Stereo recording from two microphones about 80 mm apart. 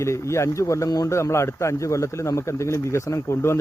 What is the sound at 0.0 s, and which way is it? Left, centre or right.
Speech, left.